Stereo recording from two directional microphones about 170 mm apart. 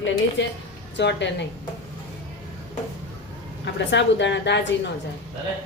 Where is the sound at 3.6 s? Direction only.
90° left.